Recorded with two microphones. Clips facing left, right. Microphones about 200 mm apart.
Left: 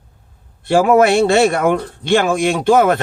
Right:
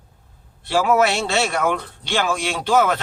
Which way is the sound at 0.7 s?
50° left (ahead or behind).